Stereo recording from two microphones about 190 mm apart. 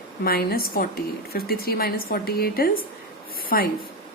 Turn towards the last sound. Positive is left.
turn(degrees=50)  # may be behind; listen again after turning